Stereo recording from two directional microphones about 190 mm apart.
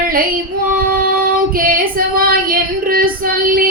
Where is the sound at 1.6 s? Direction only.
50° right (ahead or behind).